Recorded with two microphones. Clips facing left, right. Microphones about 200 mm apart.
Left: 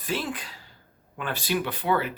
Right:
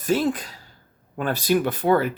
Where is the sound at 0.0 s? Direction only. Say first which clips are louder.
Right 9 dB; 45° right (ahead or behind).